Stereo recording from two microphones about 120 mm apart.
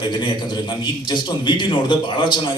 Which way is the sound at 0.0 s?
40° left (ahead or behind).